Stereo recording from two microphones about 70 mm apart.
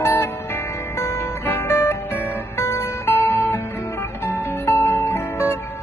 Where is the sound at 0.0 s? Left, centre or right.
Left.